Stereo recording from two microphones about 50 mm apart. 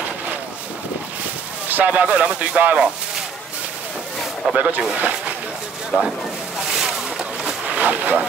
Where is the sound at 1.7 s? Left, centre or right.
Right.